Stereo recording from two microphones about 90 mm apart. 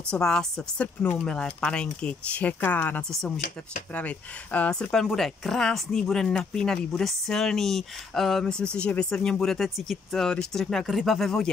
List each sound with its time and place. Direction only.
0.1 s speech: 5° left (ahead or behind)
3.0 s speech: 5° left (ahead or behind)
3.9 s speech: 15° left (ahead or behind)